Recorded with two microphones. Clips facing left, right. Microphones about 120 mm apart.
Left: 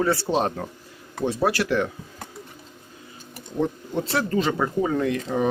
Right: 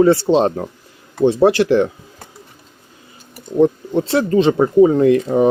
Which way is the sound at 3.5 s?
20° right (ahead or behind).